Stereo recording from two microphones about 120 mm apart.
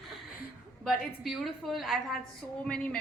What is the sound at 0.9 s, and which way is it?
A woman's voice, centre (ahead or behind).